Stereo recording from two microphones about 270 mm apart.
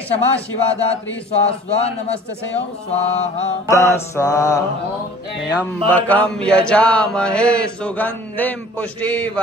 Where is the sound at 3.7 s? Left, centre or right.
Centre.